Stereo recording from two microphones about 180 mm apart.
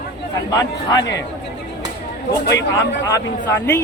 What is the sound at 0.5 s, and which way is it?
Speech, 20° left (ahead or behind).